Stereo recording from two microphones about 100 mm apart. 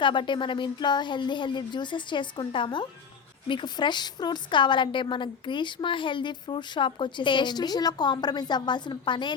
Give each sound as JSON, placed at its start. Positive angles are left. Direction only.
{"t": 0.0, "sound": "a woman's voice", "side_deg": 55}